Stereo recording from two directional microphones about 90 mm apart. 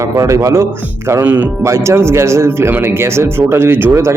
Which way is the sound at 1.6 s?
35° right (ahead or behind).